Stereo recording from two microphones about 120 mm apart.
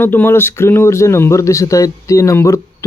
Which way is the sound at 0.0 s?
15° left (ahead or behind).